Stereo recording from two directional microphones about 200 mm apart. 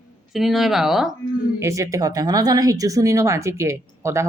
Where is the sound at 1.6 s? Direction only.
15° right (ahead or behind).